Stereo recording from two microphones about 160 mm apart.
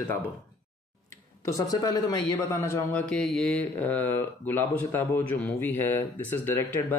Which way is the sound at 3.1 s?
5° left (ahead or behind).